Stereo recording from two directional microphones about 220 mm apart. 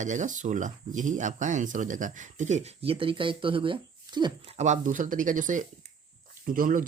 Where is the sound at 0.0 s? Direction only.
35° right (ahead or behind).